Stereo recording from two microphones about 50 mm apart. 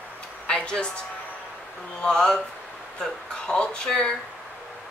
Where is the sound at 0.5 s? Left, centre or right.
Centre.